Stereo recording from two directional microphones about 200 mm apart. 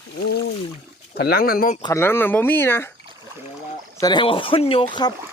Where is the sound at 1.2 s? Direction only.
50° left (ahead or behind).